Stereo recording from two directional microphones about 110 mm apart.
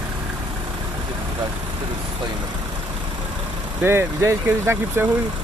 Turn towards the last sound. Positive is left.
turn(degrees=-20)  # may be behind; listen again after turning